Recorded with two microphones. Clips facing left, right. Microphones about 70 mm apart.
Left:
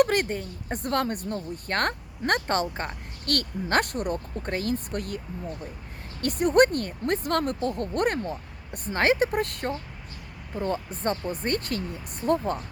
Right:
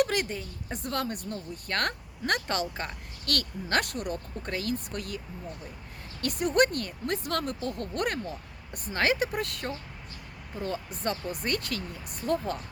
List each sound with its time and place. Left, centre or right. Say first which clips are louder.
0.0 s a woman's voice: left 5 dB; left
1.3 s speech: left 4 dB; left
6.2 s speech: left 5 dB; left